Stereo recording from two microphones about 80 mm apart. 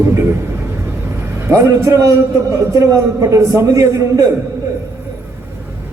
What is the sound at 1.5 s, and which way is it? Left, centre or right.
A man's voice, right.